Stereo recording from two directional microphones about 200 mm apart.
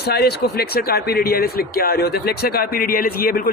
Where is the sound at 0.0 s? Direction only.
55° left (ahead or behind).